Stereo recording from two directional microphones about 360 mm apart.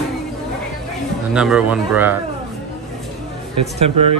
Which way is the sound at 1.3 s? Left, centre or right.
Centre.